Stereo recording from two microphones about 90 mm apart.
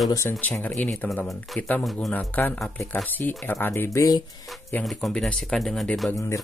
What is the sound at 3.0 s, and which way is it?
Speech, 20° left (ahead or behind).